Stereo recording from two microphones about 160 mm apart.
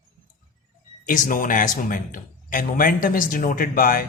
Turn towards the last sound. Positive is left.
turn(degrees=65)  # may be behind; listen again after turning